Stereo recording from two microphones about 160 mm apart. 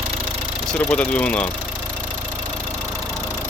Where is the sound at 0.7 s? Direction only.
10° left (ahead or behind).